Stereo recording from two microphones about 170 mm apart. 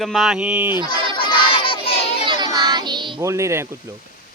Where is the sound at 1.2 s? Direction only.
30° left (ahead or behind).